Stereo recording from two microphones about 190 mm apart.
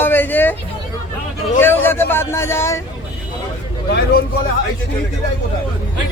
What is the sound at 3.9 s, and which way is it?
Speech, 55° left (ahead or behind).